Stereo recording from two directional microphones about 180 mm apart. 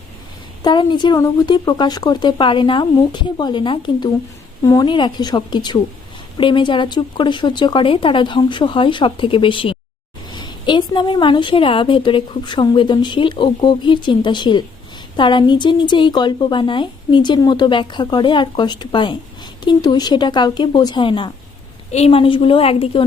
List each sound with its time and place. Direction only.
0.6 s a woman's voice: 25° left (ahead or behind)